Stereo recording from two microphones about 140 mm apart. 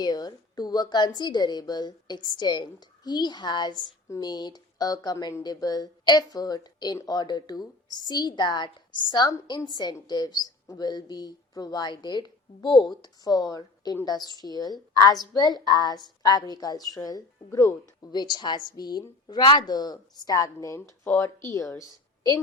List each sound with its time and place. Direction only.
0.0 s speech: 30° left (ahead or behind)